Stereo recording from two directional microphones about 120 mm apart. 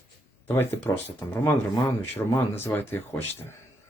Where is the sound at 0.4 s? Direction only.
20° left (ahead or behind).